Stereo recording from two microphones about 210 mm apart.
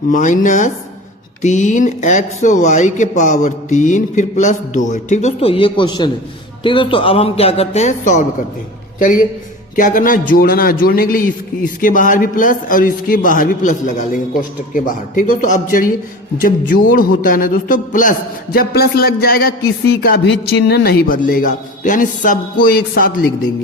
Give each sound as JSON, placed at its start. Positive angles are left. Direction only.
{"t": 0.1, "sound": "a man's voice", "side_deg": 35}